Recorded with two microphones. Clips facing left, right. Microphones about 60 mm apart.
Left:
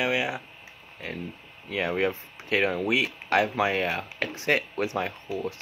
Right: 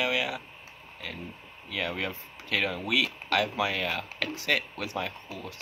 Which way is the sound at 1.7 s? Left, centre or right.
Left.